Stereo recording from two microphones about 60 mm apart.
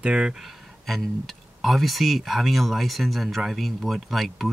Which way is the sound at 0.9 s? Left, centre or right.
Centre.